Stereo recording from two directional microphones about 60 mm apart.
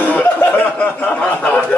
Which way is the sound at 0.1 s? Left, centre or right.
Left.